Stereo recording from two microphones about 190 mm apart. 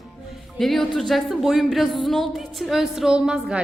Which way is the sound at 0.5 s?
Centre (ahead or behind).